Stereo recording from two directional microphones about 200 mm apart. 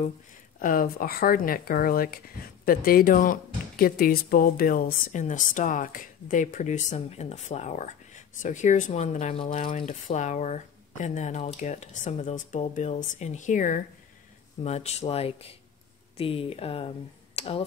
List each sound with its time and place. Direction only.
0.6 s speech: 45° left (ahead or behind)